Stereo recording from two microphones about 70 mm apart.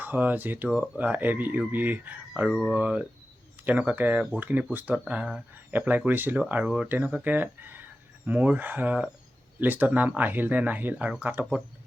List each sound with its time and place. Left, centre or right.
0.0 s speech: right
2.5 s speech: centre
2.7 s speech: centre